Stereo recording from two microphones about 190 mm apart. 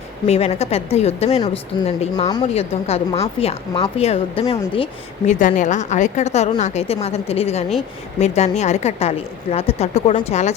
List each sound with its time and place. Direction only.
0.3 s speech: 35° left (ahead or behind)